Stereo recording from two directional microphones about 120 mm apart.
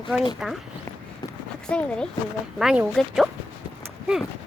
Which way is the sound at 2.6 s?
5° right (ahead or behind).